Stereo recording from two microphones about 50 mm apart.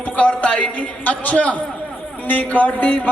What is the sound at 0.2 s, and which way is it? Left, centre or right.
Music, left.